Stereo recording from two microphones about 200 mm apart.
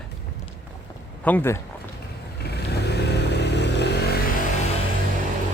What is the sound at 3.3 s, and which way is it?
Vehicle, 55° left (ahead or behind).